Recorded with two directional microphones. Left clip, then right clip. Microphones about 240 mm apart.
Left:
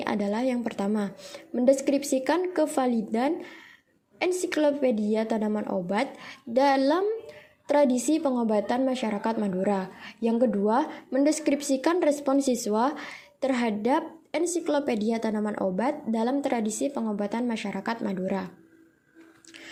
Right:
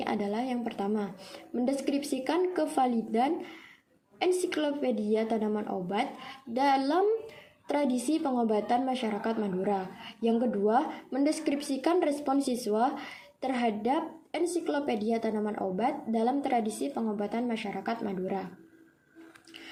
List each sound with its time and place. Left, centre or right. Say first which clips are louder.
0.0 s a woman's voice: left 4 dB; left